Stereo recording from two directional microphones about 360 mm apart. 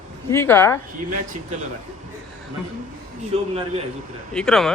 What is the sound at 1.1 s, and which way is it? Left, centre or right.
Speech, right.